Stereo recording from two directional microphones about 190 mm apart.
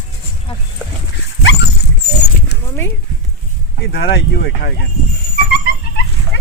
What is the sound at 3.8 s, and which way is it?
Speech, 55° left (ahead or behind).